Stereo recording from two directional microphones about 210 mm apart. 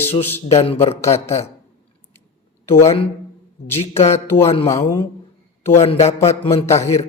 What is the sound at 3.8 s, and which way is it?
Speech, 30° left (ahead or behind).